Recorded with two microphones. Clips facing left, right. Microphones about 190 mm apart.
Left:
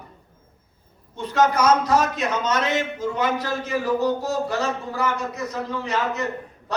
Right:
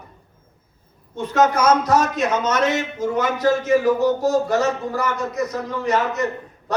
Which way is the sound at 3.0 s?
45° right (ahead or behind).